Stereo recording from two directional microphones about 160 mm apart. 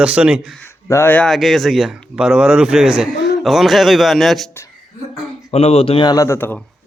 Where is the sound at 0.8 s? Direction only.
15° left (ahead or behind).